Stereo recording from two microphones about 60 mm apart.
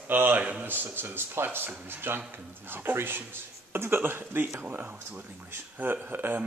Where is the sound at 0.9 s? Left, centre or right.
Right.